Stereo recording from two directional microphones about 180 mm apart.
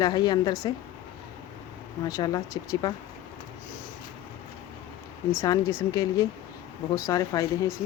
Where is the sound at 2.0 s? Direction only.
20° left (ahead or behind).